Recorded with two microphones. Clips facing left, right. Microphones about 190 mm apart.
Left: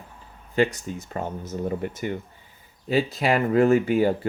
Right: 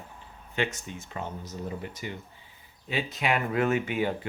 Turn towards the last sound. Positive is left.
turn(degrees=40)  # may be behind; listen again after turning